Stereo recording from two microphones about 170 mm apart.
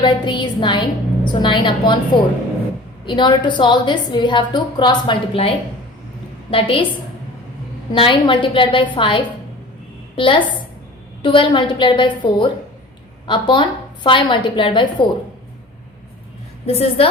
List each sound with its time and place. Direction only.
0.0 s a woman's voice: 25° left (ahead or behind)
3.1 s a woman's voice: 25° left (ahead or behind)
7.9 s a woman's voice: 30° left (ahead or behind)
16.6 s a woman's voice: 35° left (ahead or behind)